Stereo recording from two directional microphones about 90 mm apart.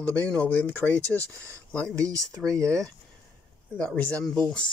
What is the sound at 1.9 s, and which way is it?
Speech, 40° right (ahead or behind).